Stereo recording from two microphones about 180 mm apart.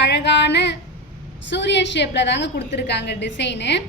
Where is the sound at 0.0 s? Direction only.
70° left (ahead or behind).